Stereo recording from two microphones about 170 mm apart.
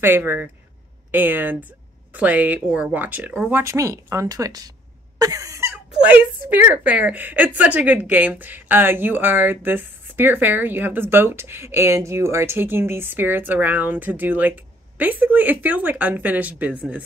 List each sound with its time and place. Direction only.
0.0 s a woman's voice: 10° right (ahead or behind)
5.2 s cough: 20° right (ahead or behind)
6.0 s a woman's voice: 10° right (ahead or behind)